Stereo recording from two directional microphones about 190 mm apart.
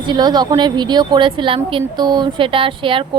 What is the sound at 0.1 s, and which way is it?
A woman's voice, 20° right (ahead or behind).